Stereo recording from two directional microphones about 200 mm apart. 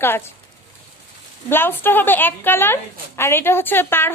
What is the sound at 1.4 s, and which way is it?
A woman's voice, 10° left (ahead or behind).